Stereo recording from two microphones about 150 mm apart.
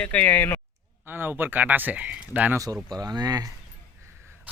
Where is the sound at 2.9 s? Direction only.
25° right (ahead or behind).